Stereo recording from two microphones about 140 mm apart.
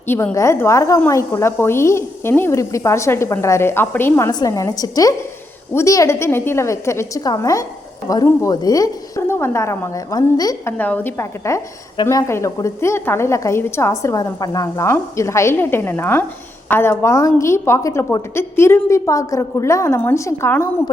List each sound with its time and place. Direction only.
0.1 s a woman's voice: 15° left (ahead or behind)
4.3 s a woman's voice: 25° left (ahead or behind)
10.8 s a woman's voice: 10° left (ahead or behind)